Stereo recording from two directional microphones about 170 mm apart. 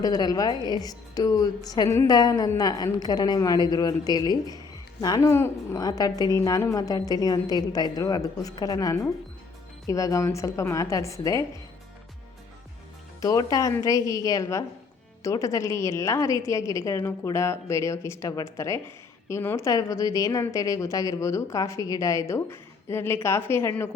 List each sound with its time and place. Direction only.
0.0 s a woman's voice: 20° left (ahead or behind)
13.2 s a woman's voice: 20° left (ahead or behind)